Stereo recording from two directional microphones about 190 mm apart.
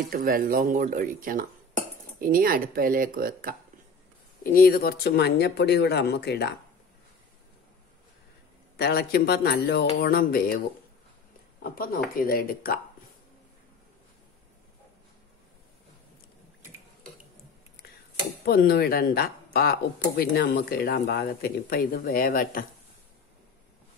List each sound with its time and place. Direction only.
0.1 s speech: 50° right (ahead or behind)
4.4 s speech: 50° left (ahead or behind)
8.7 s speech: 55° left (ahead or behind)
11.6 s speech: 50° left (ahead or behind)
18.4 s speech: 55° left (ahead or behind)